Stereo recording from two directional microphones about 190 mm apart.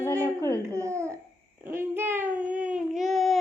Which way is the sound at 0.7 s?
15° right (ahead or behind).